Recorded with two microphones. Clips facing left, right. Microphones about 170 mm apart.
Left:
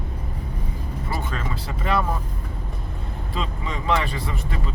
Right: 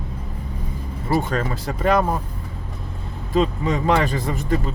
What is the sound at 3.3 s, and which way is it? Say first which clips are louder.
Speech: right 11 dB; 45° right (ahead or behind).